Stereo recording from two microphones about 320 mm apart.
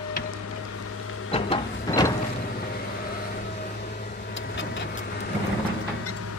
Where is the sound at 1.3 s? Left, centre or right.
Centre.